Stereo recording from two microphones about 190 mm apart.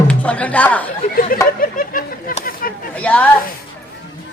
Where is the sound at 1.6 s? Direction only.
45° left (ahead or behind).